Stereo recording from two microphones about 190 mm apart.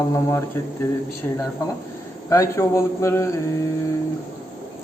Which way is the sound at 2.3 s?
15° left (ahead or behind).